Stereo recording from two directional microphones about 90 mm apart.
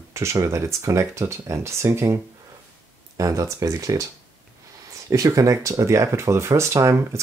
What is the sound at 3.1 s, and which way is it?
Speech, 40° right (ahead or behind).